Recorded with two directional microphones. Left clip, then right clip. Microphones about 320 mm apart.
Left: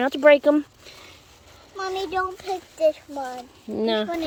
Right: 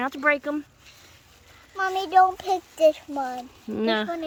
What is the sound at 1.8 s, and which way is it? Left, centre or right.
Speech, centre.